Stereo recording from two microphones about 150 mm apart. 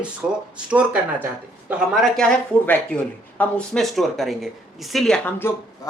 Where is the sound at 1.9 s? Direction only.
Centre (ahead or behind).